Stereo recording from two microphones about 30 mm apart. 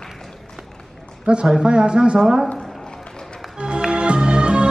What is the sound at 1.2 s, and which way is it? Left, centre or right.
Speech, right.